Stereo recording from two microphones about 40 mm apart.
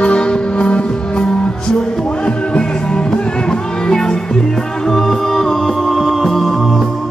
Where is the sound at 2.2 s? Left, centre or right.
Left.